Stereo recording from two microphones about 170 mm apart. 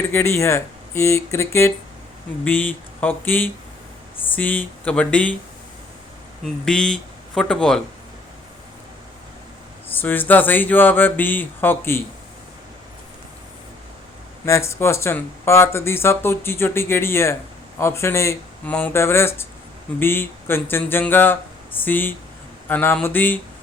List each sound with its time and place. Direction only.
0.1 s speech: 15° left (ahead or behind)
6.4 s speech: 5° left (ahead or behind)
9.9 s speech: 10° left (ahead or behind)
14.4 s speech: 15° left (ahead or behind)